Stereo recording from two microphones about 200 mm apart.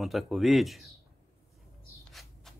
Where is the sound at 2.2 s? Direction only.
Centre (ahead or behind).